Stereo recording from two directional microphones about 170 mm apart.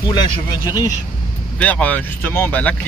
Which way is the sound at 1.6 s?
10° left (ahead or behind).